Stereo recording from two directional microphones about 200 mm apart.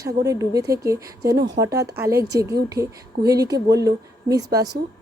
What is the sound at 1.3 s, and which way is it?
Speech, 60° right (ahead or behind).